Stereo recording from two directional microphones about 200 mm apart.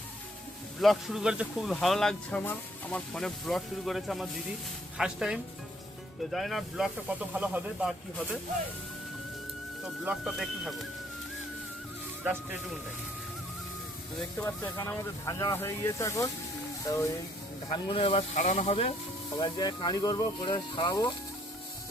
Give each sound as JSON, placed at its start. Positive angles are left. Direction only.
{"t": 0.8, "sound": "speech", "side_deg": 0}
{"t": 9.8, "sound": "speech", "side_deg": -5}
{"t": 12.2, "sound": "speech", "side_deg": -10}
{"t": 14.3, "sound": "speech", "side_deg": 15}
{"t": 19.4, "sound": "speech", "side_deg": 20}